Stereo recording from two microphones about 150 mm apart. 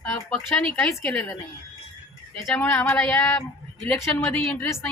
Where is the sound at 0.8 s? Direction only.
5° left (ahead or behind).